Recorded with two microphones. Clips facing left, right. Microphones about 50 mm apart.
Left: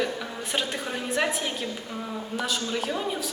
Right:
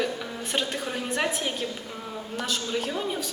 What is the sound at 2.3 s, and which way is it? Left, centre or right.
Speech, centre.